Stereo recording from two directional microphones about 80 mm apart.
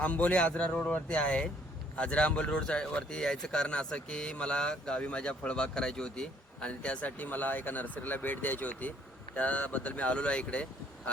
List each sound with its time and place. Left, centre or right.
0.0 s speech: centre